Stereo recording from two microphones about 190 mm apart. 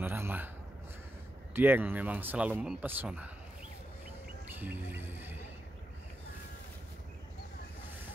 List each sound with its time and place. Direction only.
0.0 s a sound: 10° right (ahead or behind)
1.5 s speech: 10° right (ahead or behind)
4.6 s speech: 10° right (ahead or behind)